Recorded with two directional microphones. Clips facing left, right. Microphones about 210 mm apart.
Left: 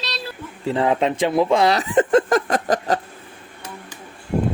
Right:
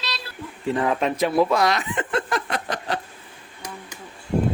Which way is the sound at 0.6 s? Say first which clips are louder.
Left 3 dB; 25° left (ahead or behind).